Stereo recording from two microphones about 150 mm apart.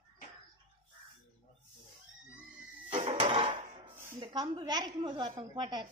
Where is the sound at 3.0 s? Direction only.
45° right (ahead or behind).